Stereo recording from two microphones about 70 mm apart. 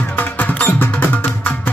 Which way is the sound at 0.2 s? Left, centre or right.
Left.